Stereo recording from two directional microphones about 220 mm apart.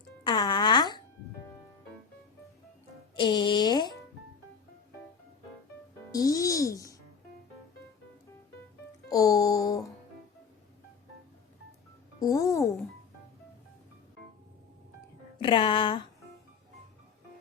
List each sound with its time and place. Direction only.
0.3 s music: 20° left (ahead or behind)
3.2 s speech: 20° left (ahead or behind)
6.1 s music: 15° left (ahead or behind)
9.0 s music: 15° left (ahead or behind)
12.2 s music: 15° left (ahead or behind)
15.4 s music: 20° left (ahead or behind)